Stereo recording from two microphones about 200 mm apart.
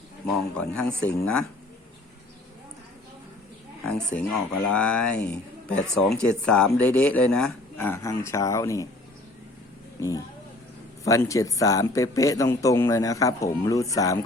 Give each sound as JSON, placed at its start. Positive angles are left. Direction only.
{"t": 0.5, "sound": "speech", "side_deg": 5}
{"t": 3.8, "sound": "speech", "side_deg": 5}
{"t": 10.0, "sound": "speech", "side_deg": 15}